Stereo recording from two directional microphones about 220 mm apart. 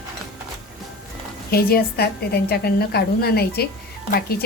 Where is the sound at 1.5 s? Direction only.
45° left (ahead or behind).